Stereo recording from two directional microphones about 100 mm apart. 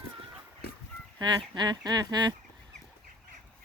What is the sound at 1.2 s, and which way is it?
Speech, 45° right (ahead or behind).